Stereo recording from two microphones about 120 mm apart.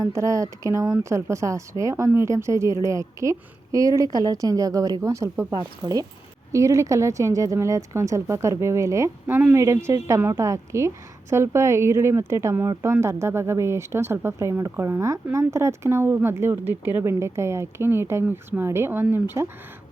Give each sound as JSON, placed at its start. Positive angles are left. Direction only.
{"t": 0.0, "sound": "speech", "side_deg": -25}